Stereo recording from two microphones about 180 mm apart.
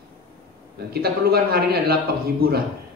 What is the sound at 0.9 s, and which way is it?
Speech, 60° right (ahead or behind).